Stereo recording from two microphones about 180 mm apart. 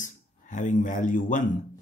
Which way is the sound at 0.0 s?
45° left (ahead or behind).